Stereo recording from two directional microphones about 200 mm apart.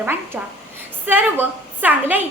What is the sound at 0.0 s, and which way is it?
A woman's voice, 10° right (ahead or behind).